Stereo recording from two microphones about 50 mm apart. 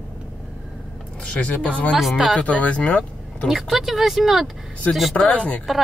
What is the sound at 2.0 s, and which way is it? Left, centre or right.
Speech, centre.